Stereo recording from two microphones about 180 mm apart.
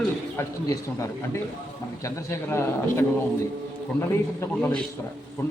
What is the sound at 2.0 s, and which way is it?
Speech, 15° left (ahead or behind).